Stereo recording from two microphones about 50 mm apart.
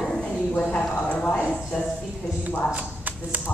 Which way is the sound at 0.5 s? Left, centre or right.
Left.